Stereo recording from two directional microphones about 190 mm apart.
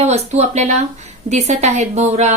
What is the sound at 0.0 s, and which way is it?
Speech, 35° right (ahead or behind).